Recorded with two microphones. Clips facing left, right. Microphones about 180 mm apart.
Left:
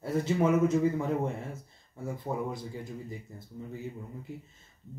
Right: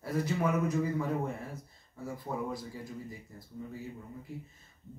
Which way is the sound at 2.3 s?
25° left (ahead or behind).